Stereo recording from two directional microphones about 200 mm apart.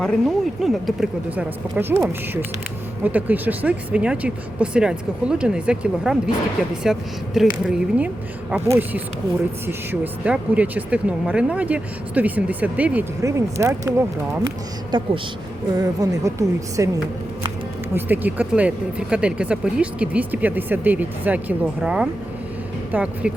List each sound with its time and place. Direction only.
0.0 s a woman's voice: 5° left (ahead or behind); by 16.9 s 15° right (ahead or behind)
17.9 s speech: 10° right (ahead or behind)